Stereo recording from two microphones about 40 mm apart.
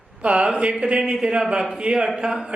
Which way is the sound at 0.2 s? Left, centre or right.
Right.